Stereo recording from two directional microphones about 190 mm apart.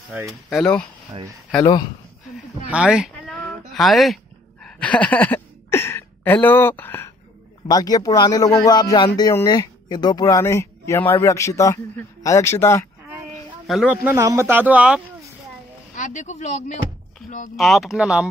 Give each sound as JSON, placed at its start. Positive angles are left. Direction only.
{"t": 0.3, "sound": "speech", "side_deg": 0}
{"t": 1.6, "sound": "speech", "side_deg": 20}
{"t": 2.7, "sound": "a sound", "side_deg": -5}
{"t": 7.6, "sound": "speech", "side_deg": 20}
{"t": 13.7, "sound": "speech", "side_deg": -5}
{"t": 16.0, "sound": "speech", "side_deg": 40}
{"t": 17.6, "sound": "speech", "side_deg": 0}